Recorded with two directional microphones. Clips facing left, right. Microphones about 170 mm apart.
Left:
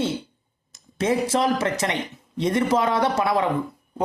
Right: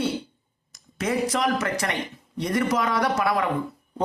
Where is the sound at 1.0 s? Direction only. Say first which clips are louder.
Left 3 dB; 25° left (ahead or behind).